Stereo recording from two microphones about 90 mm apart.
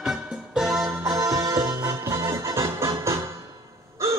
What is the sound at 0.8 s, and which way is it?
Music, 35° right (ahead or behind).